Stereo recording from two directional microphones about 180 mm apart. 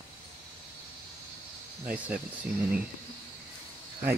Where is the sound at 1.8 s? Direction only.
5° right (ahead or behind).